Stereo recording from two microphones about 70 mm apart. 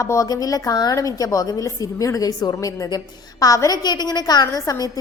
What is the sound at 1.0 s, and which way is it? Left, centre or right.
A woman's voice, left.